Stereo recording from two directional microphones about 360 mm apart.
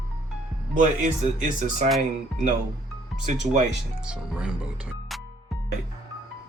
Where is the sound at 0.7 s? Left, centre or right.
Right.